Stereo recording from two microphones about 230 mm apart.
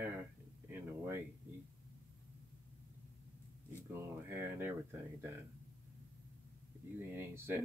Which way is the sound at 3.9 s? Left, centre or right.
Centre.